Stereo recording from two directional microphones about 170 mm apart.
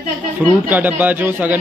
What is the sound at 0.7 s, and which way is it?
Speech, 10° right (ahead or behind).